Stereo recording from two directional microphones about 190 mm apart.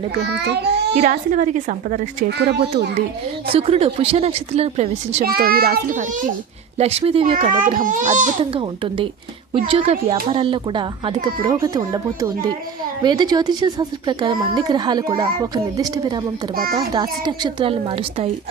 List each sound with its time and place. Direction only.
0.1 s a child's voice: 60° right (ahead or behind)
0.9 s a child's voice: 40° right (ahead or behind)
2.4 s a child's voice: 60° right (ahead or behind)
3.5 s speech: 30° right (ahead or behind)
5.2 s a child's voice: 55° right (ahead or behind)
6.7 s a child's voice: 30° right (ahead or behind)
8.5 s a child's voice: 25° right (ahead or behind)